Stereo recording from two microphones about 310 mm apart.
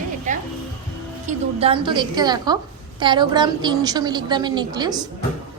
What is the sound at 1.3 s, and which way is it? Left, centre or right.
A woman's voice, centre.